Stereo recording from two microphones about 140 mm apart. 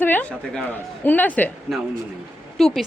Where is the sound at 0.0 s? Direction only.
10° left (ahead or behind).